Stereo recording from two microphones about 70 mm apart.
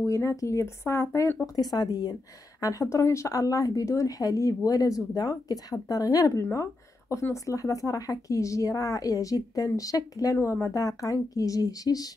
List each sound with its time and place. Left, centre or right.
0.0 s speech: left
1.4 s speech: left
2.6 s speech: left
10.3 s speech: left